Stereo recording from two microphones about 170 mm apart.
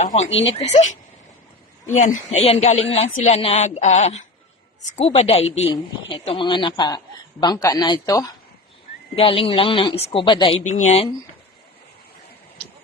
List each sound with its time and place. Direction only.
0.3 s speech: 90° left
0.6 s speech: 40° left (ahead or behind)
2.0 s a man's voice: 45° left (ahead or behind); by 8.3 s 20° left (ahead or behind)
9.1 s speech: 35° left (ahead or behind)